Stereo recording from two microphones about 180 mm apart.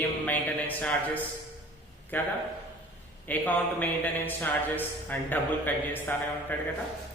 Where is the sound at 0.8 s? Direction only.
10° left (ahead or behind).